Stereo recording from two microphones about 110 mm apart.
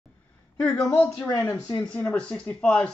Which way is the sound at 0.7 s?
30° left (ahead or behind).